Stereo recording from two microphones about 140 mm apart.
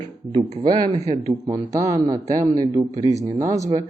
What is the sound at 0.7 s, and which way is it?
Speech, 25° right (ahead or behind).